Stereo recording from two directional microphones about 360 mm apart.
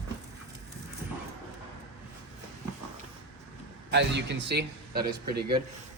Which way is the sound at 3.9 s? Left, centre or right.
Right.